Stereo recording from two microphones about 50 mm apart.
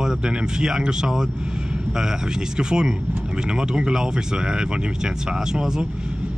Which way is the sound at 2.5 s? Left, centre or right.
Centre.